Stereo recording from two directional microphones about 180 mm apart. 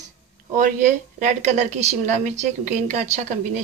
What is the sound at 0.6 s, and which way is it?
A woman's voice, 45° right (ahead or behind).